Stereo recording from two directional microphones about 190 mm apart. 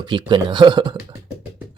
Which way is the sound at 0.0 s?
25° right (ahead or behind).